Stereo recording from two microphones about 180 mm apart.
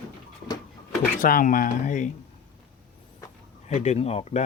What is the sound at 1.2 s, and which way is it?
Speech, 50° left (ahead or behind).